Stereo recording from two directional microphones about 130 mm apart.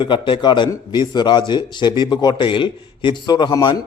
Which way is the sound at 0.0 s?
35° left (ahead or behind).